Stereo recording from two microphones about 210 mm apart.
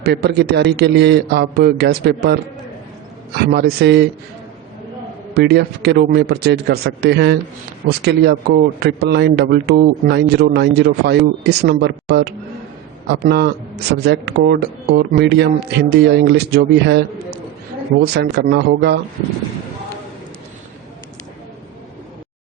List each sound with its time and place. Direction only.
0.0 s speech: 50° right (ahead or behind)
5.3 s speech: 50° right (ahead or behind)